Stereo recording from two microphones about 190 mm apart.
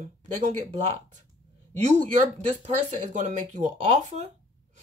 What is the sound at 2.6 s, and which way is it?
Speech, 40° right (ahead or behind).